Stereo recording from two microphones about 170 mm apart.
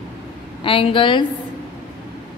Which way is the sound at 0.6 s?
30° left (ahead or behind).